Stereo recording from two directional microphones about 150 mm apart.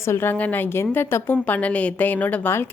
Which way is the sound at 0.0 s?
15° left (ahead or behind).